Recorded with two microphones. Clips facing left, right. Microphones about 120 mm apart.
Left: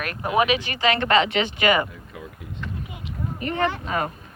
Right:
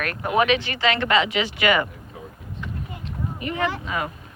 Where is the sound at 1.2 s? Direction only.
50° left (ahead or behind).